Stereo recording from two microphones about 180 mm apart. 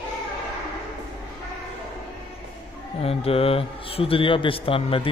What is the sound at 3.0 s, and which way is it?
Speech, 35° left (ahead or behind).